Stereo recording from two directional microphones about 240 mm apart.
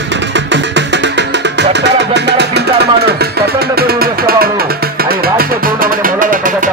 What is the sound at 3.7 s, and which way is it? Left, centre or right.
Music, right.